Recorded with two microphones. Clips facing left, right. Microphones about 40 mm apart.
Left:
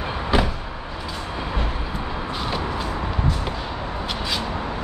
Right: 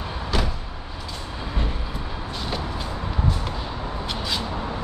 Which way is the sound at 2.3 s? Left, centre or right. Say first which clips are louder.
Left 2 dB; centre.